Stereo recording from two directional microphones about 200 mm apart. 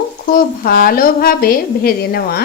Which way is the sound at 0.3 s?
45° left (ahead or behind).